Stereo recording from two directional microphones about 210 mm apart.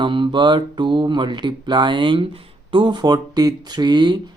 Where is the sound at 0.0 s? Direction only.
20° right (ahead or behind).